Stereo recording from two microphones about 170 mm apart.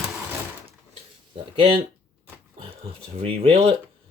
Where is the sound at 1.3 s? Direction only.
30° right (ahead or behind).